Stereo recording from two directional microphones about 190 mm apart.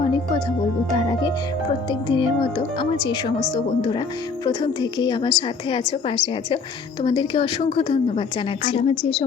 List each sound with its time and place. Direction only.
0.9 s a woman's voice: 20° left (ahead or behind)